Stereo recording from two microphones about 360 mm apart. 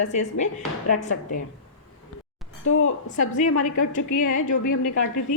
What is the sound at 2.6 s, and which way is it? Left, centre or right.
A woman's voice, left.